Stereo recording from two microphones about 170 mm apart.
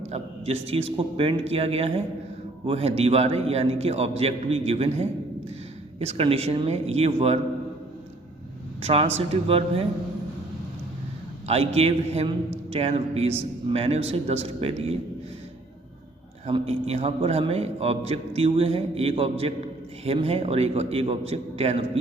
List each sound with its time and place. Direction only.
0.1 s a man's voice: 35° right (ahead or behind)
8.8 s a man's voice: 35° right (ahead or behind)
11.4 s a man's voice: 40° right (ahead or behind)
16.5 s a man's voice: 35° right (ahead or behind)